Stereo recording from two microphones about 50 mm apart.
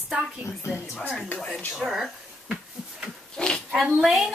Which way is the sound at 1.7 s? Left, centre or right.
Centre.